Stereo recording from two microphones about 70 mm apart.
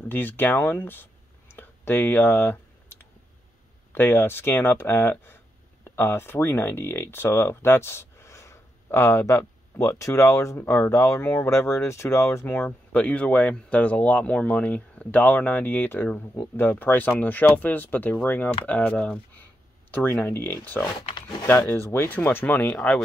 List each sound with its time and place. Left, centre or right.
0.1 s speech: left
1.5 s clicking: left
3.9 s speech: left